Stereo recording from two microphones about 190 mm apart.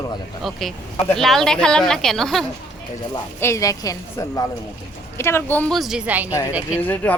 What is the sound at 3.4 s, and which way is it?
A woman's voice, 15° left (ahead or behind).